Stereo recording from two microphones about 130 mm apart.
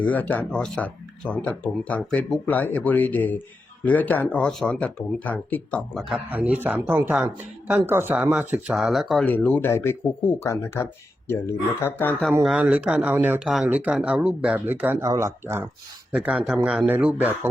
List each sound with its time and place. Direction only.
0.0 s speech: 10° left (ahead or behind)
5.9 s speech: centre (ahead or behind)
9.2 s speech: 10° left (ahead or behind)
12.4 s speech: 5° right (ahead or behind)
13.4 s speech: 5° right (ahead or behind); by 15.6 s 20° right (ahead or behind)
16.1 s speech: 10° right (ahead or behind)